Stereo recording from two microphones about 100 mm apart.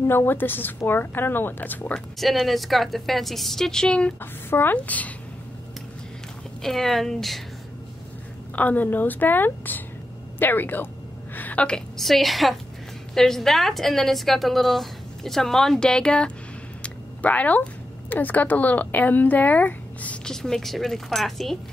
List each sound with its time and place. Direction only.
0.0 s speech: 20° left (ahead or behind)
2.1 s a woman's voice: centre (ahead or behind)
4.2 s speech: 20° left (ahead or behind)
6.6 s a woman's voice: centre (ahead or behind)
8.5 s a woman's voice: 15° left (ahead or behind)
16.8 s a sound: 15° left (ahead or behind)
18.1 s speech: 15° left (ahead or behind); by 21.5 s centre (ahead or behind)